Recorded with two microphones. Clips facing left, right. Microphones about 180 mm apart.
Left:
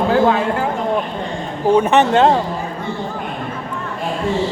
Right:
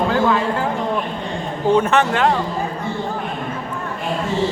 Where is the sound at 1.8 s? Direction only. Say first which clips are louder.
Left 6 dB; 15° left (ahead or behind).